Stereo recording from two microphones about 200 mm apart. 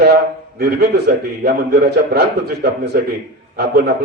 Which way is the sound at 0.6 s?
55° right (ahead or behind).